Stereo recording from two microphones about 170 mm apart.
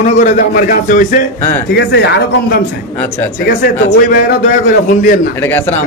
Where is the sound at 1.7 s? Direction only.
85° left.